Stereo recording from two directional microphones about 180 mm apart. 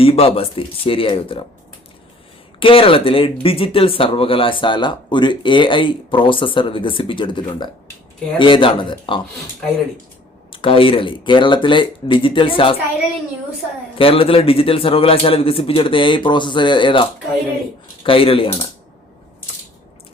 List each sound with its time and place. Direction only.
0.0 s speech: 30° left (ahead or behind)
2.6 s a man's voice: 30° left (ahead or behind)
10.5 s speech: 30° left (ahead or behind)
14.0 s a man's voice: 30° left (ahead or behind)